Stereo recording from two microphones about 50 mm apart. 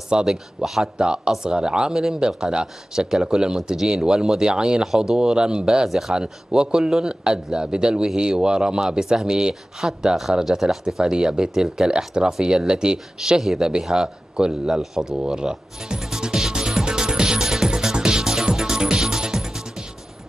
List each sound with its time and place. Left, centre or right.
0.1 s speech: centre
5.9 s speech: centre
6.1 s speech: centre
11.0 s speech: centre
14.8 s music: centre